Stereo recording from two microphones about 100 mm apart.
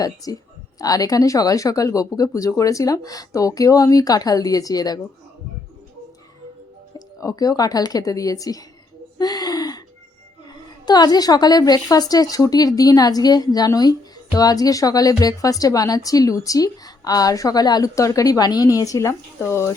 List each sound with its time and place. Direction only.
0.0 s speech: 35° left (ahead or behind)
7.2 s speech: 35° left (ahead or behind)
9.1 s a sound: 40° left (ahead or behind)
10.8 s speech: 45° left (ahead or behind); by 19.7 s 25° left (ahead or behind)